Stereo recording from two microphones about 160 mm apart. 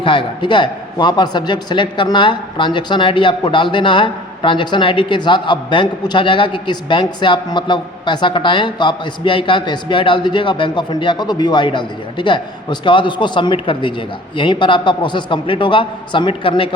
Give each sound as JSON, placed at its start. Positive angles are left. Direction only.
{"t": 0.0, "sound": "a man's voice", "side_deg": 30}